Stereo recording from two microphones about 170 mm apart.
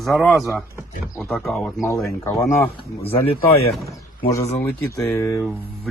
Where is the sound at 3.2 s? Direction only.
35° left (ahead or behind).